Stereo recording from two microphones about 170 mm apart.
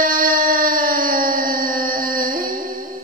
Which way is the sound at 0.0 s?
55° right (ahead or behind).